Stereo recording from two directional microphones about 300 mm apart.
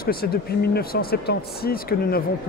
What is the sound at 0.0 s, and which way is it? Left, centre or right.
Speech, left.